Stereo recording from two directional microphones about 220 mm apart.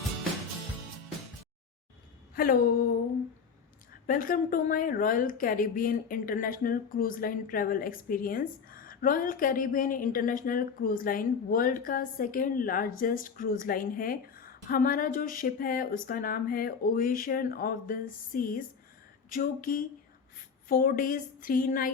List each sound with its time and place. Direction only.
2.3 s speech: 40° left (ahead or behind)
4.0 s speech: 40° left (ahead or behind)